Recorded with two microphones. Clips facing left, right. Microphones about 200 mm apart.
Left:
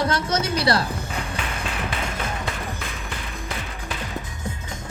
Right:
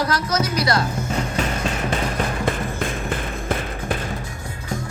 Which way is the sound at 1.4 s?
40° right (ahead or behind).